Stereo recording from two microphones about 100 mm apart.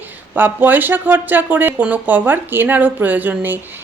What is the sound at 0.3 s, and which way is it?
Speech, 20° right (ahead or behind).